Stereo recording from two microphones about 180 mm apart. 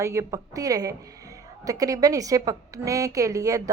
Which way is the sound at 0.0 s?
15° right (ahead or behind).